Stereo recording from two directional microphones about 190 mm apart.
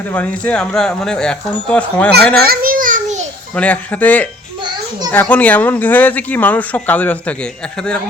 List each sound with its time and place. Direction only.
0.1 s speech: 10° left (ahead or behind)
2.4 s a sound: 50° right (ahead or behind)
3.5 s speech: 5° left (ahead or behind)